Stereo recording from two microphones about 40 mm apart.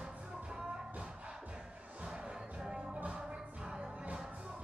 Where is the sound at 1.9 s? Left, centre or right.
Right.